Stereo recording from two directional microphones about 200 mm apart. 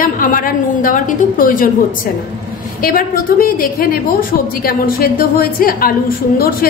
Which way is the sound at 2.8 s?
45° left (ahead or behind).